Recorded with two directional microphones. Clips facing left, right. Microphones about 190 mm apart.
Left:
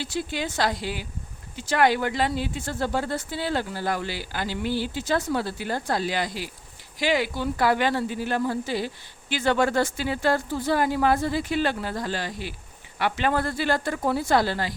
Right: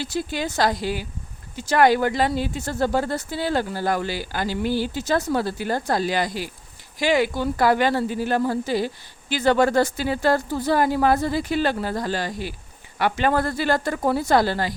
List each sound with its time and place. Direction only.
0.0 s speech: 40° right (ahead or behind)